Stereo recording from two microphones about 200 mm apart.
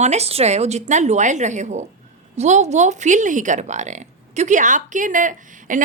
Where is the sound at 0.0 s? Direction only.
35° right (ahead or behind).